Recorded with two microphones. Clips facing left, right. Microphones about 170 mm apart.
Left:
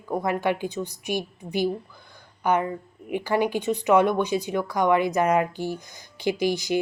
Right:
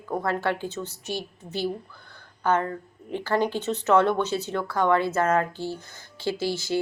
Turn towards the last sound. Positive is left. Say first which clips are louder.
# left 3 dB
turn(degrees=15)  # may be behind; listen again after turning